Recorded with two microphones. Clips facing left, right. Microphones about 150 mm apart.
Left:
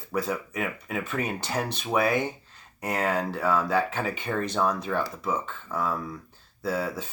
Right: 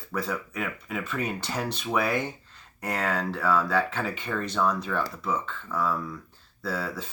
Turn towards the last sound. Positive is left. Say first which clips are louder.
# left 3 dB
turn(degrees=20)  # may be behind; listen again after turning